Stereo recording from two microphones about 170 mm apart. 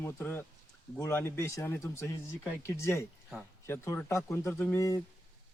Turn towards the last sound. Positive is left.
turn(degrees=20)  # may be behind; listen again after turning